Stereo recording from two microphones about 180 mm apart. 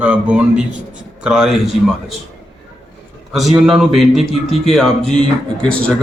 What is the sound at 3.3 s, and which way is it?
A man's voice, centre (ahead or behind).